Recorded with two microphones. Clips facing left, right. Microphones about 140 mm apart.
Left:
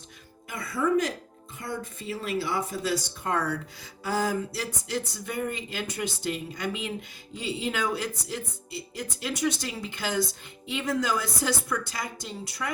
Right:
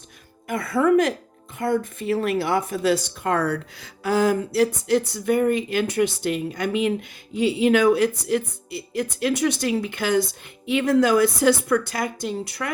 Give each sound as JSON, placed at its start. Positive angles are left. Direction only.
{"t": 0.4, "sound": "speech", "side_deg": -55}